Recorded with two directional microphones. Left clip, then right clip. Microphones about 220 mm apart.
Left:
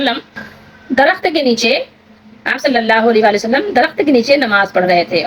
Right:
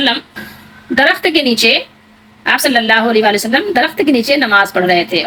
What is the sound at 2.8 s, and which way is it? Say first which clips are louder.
A woman's voice: even; 5° left (ahead or behind).